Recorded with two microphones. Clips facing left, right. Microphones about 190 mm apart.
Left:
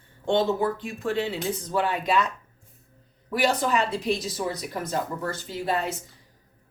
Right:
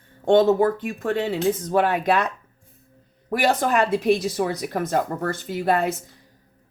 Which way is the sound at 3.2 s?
50° right (ahead or behind).